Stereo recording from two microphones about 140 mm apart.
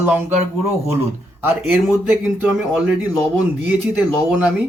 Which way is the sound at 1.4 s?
15° right (ahead or behind).